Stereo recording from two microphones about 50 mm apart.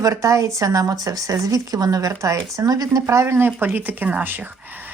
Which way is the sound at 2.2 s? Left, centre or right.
Right.